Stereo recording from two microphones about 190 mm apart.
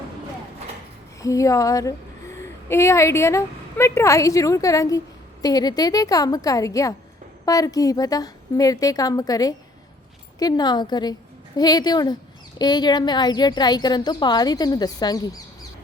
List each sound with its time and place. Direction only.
1.2 s a woman's voice: 15° left (ahead or behind)